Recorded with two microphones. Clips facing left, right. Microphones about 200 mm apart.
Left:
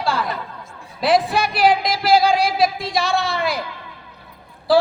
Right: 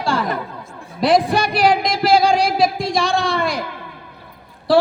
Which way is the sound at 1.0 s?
Centre (ahead or behind).